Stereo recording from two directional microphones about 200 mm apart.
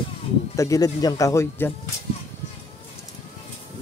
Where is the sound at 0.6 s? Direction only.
15° left (ahead or behind).